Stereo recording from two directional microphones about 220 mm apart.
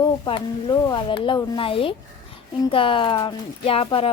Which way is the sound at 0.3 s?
20° left (ahead or behind).